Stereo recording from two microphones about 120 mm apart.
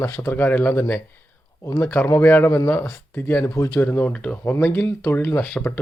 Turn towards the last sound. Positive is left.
turn(degrees=15)  # may be behind; listen again after turning